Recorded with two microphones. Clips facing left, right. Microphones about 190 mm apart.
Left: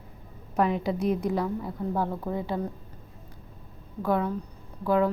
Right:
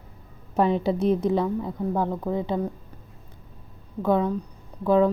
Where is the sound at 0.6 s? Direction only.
30° right (ahead or behind).